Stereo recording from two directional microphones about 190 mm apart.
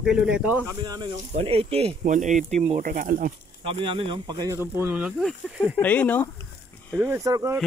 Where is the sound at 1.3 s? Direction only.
30° right (ahead or behind); by 3.3 s 45° right (ahead or behind).